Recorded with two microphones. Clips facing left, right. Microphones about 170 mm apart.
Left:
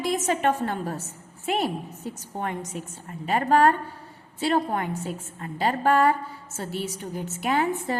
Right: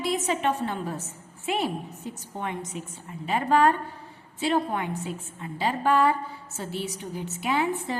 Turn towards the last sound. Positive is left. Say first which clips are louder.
# left 2 dB
turn(degrees=45)  # may be behind; listen again after turning